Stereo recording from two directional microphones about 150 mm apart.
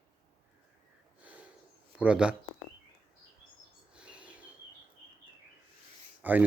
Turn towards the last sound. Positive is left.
turn(degrees=-10)  # may be behind; listen again after turning